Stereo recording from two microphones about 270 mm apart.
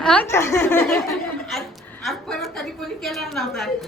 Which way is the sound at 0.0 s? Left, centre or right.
Centre.